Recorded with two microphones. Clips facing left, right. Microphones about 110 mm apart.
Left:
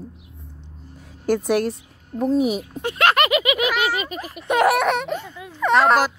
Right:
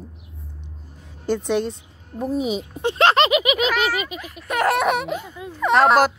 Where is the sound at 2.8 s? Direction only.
25° right (ahead or behind).